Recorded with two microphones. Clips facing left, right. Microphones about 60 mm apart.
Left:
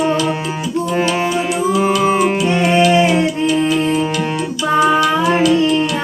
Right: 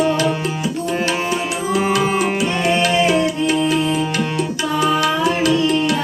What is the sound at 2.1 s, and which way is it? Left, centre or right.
Music, left.